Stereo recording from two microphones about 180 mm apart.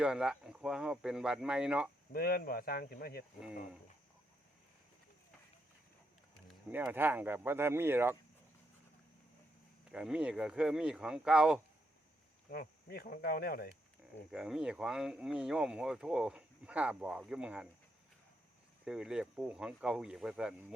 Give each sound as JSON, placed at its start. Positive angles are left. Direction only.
{"t": 0.0, "sound": "speech", "side_deg": -5}
{"t": 2.1, "sound": "speech", "side_deg": 60}
{"t": 6.7, "sound": "speech", "side_deg": -10}
{"t": 9.9, "sound": "speech", "side_deg": -5}
{"t": 12.5, "sound": "speech", "side_deg": 60}
{"t": 14.3, "sound": "speech", "side_deg": -5}
{"t": 18.9, "sound": "speech", "side_deg": -5}